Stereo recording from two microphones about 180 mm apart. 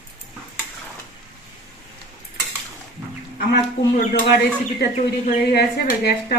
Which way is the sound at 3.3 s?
55° left (ahead or behind).